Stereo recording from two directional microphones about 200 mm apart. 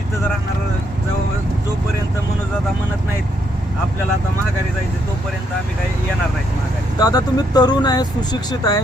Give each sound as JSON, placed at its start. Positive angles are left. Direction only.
{"t": 7.0, "sound": "speech", "side_deg": 20}